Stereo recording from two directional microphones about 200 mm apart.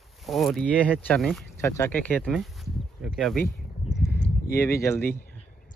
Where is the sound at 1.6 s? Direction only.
10° left (ahead or behind).